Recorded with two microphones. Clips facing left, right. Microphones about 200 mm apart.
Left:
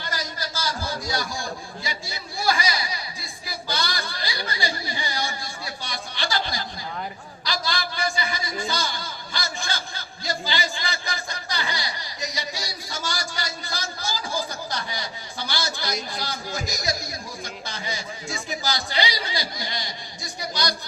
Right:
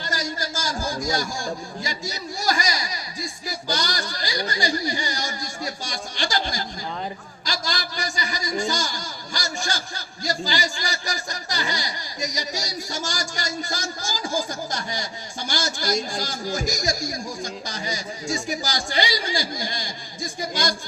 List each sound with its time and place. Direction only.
0.0 s a man's voice: 45° right (ahead or behind)